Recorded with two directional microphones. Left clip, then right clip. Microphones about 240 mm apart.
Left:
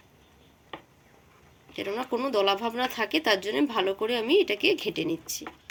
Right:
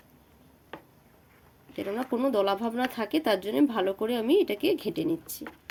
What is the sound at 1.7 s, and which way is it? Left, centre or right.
Speech, right.